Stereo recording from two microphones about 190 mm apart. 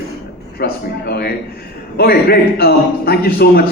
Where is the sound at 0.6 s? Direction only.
55° left (ahead or behind).